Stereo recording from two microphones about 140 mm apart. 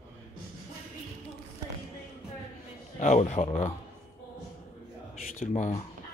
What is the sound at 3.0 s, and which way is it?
Speech, 60° left (ahead or behind).